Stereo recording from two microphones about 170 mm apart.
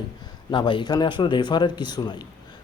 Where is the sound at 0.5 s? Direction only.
30° left (ahead or behind).